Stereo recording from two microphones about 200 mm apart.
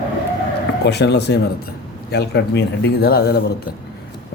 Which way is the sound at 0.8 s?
55° left (ahead or behind).